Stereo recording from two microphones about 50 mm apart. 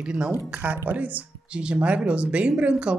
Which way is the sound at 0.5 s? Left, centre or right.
Right.